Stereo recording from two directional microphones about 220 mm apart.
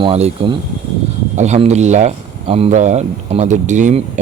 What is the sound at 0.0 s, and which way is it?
Speech, 30° right (ahead or behind).